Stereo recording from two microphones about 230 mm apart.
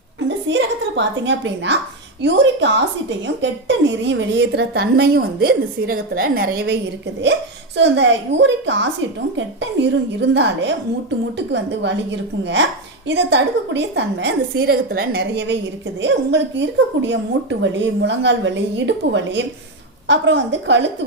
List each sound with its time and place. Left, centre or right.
0.3 s a woman's voice: right
7.8 s a woman's voice: right